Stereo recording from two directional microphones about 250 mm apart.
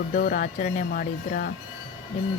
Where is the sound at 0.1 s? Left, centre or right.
Left.